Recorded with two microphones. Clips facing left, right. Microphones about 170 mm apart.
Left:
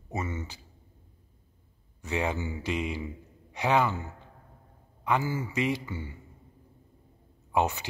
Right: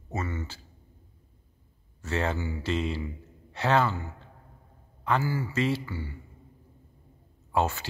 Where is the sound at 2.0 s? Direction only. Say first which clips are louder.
Right 1 dB; 15° left (ahead or behind).